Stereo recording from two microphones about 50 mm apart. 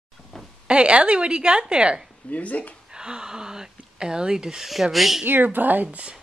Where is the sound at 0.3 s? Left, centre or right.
Centre.